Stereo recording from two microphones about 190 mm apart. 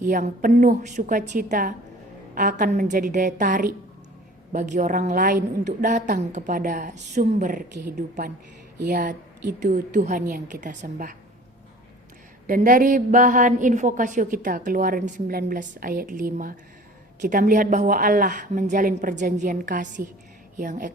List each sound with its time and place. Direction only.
0.0 s a woman's voice: 45° right (ahead or behind)
12.5 s a woman's voice: 45° right (ahead or behind)